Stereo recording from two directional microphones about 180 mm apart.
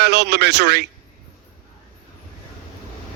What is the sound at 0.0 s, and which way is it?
Speech, 65° right (ahead or behind).